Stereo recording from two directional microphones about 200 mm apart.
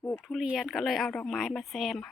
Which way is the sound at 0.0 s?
10° left (ahead or behind).